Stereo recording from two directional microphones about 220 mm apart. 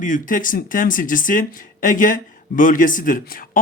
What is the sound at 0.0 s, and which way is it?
Speech, 35° left (ahead or behind).